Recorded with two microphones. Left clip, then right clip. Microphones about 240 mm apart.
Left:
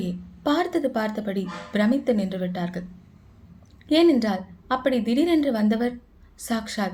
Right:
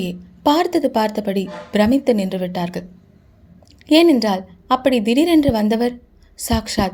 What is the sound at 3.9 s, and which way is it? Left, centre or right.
A woman's voice, right.